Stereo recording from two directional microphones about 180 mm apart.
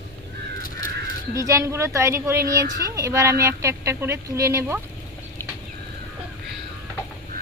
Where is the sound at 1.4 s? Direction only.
15° right (ahead or behind).